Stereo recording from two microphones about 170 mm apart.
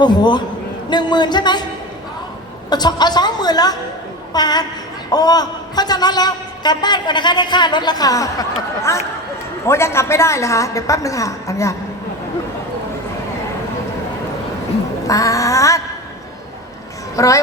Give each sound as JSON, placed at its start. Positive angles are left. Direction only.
{"t": 0.0, "sound": "a man's voice", "side_deg": 25}
{"t": 2.6, "sound": "a man's voice", "side_deg": 25}
{"t": 15.0, "sound": "a man's voice", "side_deg": 20}
{"t": 17.2, "sound": "a man's voice", "side_deg": 20}